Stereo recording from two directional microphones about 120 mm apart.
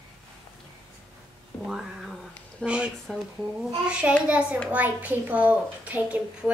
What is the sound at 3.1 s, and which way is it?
A child's voice, 5° right (ahead or behind).